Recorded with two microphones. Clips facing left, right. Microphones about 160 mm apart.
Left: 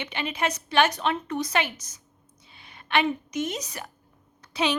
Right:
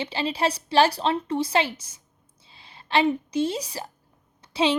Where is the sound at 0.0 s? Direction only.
30° right (ahead or behind).